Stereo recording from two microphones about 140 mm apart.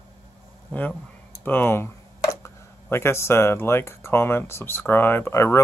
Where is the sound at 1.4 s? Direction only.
15° left (ahead or behind).